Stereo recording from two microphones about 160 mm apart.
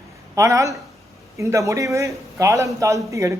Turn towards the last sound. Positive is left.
turn(degrees=-20)  # may be behind; listen again after turning